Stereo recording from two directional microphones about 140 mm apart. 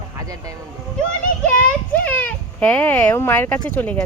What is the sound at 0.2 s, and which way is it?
Speech, 25° right (ahead or behind).